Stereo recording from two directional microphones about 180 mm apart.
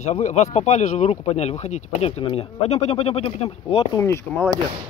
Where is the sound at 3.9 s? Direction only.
15° left (ahead or behind).